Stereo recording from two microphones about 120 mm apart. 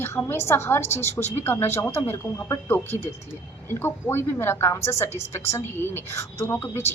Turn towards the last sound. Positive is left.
turn(degrees=20)  # may be behind; listen again after turning